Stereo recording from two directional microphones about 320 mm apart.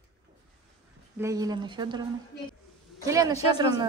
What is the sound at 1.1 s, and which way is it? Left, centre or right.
A woman's voice, centre.